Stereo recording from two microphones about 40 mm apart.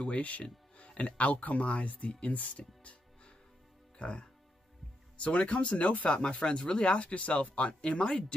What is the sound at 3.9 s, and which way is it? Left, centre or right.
Speech, left.